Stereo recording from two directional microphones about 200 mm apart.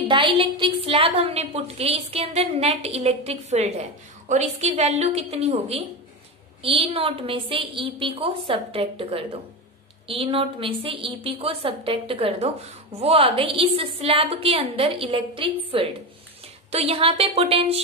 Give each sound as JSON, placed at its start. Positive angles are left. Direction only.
{"t": 0.1, "sound": "a woman's voice", "side_deg": -25}